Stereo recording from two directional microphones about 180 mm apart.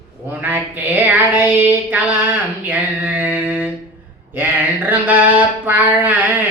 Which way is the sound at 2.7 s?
10° right (ahead or behind).